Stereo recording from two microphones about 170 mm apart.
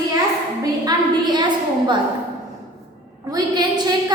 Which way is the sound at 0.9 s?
25° right (ahead or behind).